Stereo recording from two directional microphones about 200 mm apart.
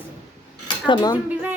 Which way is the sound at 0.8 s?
20° left (ahead or behind).